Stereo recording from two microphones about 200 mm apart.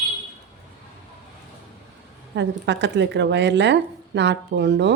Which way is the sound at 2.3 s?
60° right (ahead or behind).